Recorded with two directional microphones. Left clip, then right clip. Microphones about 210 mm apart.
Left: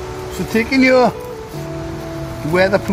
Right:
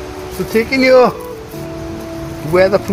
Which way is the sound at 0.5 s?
25° right (ahead or behind).